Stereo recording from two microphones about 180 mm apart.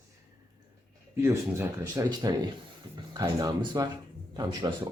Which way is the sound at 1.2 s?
15° right (ahead or behind).